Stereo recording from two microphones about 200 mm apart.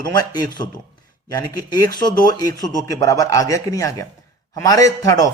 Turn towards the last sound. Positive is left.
turn(degrees=15)  # may be behind; listen again after turning